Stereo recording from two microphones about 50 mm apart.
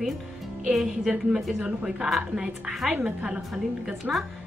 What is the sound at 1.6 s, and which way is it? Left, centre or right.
A woman's voice, centre.